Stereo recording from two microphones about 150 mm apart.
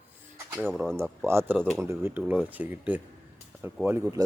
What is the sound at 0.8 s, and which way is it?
Speech, 15° right (ahead or behind).